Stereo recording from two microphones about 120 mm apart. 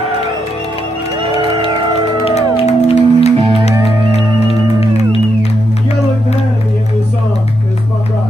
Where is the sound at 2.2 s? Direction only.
60° left (ahead or behind).